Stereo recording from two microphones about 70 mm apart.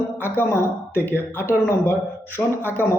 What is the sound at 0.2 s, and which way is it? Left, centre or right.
Speech, left.